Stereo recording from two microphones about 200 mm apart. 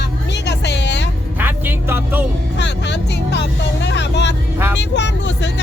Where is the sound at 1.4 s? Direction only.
10° right (ahead or behind).